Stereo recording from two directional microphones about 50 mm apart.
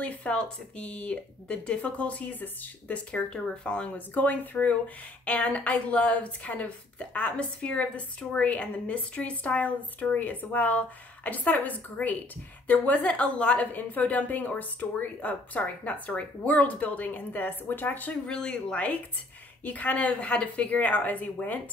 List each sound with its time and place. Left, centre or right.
0.0 s speech: left
0.3 s a woman's voice: left
3.1 s a woman's voice: centre
4.1 s a woman's voice: left
18.2 s a woman's voice: centre
19.6 s a woman's voice: left